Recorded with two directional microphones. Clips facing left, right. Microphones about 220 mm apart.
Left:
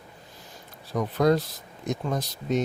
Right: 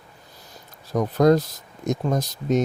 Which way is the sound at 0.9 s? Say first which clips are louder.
Right 5 dB; 45° right (ahead or behind).